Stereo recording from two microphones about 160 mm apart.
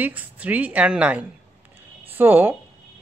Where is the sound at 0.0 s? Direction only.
10° right (ahead or behind).